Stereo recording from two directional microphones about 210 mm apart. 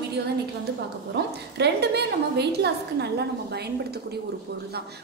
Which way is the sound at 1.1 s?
50° right (ahead or behind).